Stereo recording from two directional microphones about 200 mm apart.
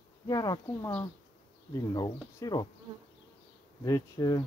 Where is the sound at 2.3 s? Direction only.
20° left (ahead or behind).